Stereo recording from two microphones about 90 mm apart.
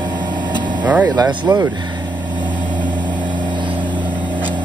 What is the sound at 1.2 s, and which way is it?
Speech, 45° right (ahead or behind).